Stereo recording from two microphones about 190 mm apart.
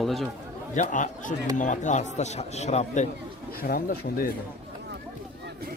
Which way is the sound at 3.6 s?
50° left (ahead or behind).